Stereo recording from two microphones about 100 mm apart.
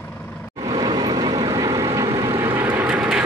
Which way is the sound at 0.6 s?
50° right (ahead or behind).